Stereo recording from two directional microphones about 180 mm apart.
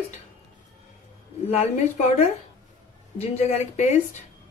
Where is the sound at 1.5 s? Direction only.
35° left (ahead or behind).